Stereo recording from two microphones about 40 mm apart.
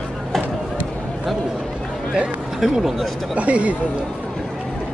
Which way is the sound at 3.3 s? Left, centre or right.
Right.